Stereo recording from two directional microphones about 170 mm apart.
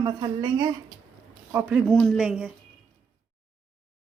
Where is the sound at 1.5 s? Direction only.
10° right (ahead or behind).